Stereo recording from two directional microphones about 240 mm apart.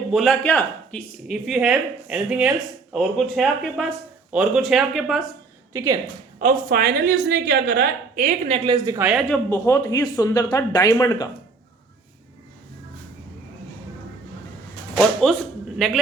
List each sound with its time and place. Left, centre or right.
0.1 s speech: centre
5.7 s a woman's voice: centre
6.4 s a woman's voice: right; by 9.2 s centre
9.3 s speech: centre
14.9 s a sound: centre